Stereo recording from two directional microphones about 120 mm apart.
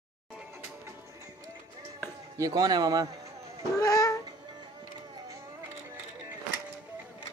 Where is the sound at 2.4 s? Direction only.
30° right (ahead or behind).